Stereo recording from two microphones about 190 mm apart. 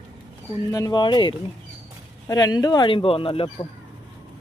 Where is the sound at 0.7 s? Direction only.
20° left (ahead or behind).